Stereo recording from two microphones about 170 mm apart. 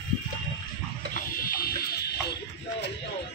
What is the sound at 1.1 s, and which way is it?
Music, 60° left (ahead or behind).